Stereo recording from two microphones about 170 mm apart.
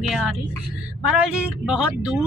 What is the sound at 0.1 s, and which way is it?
Speech, 5° right (ahead or behind).